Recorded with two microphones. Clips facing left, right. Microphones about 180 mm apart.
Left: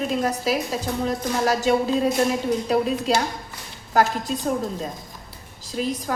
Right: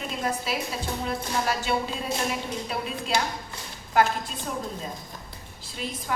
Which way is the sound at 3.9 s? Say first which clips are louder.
Left 2 dB; 40° left (ahead or behind).